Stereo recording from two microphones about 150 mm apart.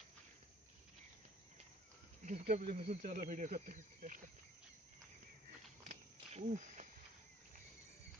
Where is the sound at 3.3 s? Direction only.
55° right (ahead or behind).